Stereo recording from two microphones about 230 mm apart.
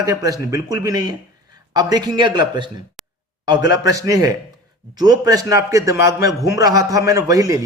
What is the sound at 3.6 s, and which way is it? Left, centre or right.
A man's voice, centre.